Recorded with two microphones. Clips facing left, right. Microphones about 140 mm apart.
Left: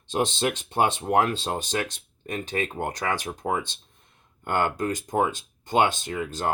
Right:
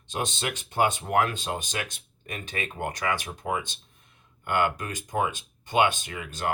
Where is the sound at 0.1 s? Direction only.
30° left (ahead or behind).